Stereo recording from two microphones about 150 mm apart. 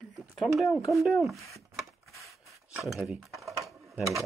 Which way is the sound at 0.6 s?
Centre (ahead or behind).